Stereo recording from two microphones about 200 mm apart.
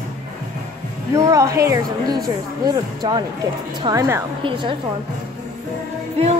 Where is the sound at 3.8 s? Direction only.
15° right (ahead or behind).